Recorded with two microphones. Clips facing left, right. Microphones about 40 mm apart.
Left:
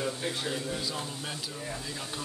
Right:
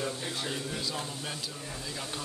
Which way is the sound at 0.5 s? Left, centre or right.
Centre.